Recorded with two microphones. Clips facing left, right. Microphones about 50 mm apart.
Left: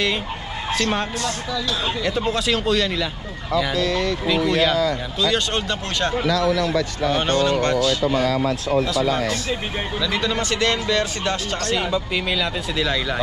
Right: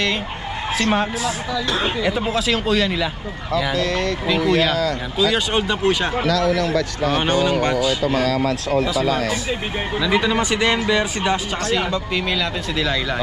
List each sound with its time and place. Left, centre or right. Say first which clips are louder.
0.7 s speech: right 3 dB; centre
3.7 s speech: right 1 dB; right
4.3 s speech: right 1 dB; centre
6.4 s speech: right 1 dB; right
7.1 s speech: right 1 dB; centre
8.4 s speech: right 1 dB; right
9.3 s speech: right 1 dB; centre
11.7 s speech: right 1 dB; centre